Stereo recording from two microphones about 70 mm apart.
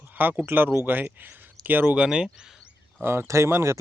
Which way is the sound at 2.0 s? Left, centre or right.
Centre.